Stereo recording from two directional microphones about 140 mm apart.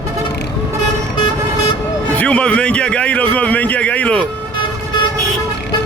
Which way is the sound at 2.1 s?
10° left (ahead or behind).